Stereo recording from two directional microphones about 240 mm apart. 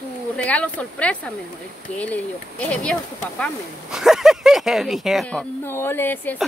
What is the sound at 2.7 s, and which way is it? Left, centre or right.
Speech, centre.